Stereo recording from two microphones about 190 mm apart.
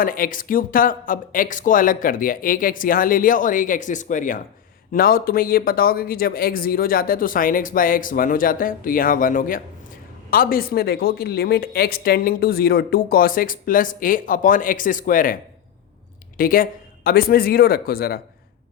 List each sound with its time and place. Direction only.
0.0 s speech: 50° left (ahead or behind)
16.4 s speech: 50° left (ahead or behind)